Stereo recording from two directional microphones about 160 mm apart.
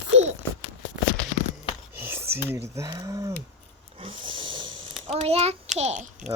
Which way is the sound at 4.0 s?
35° right (ahead or behind).